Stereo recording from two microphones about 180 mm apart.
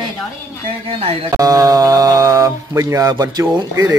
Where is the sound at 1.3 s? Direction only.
20° right (ahead or behind).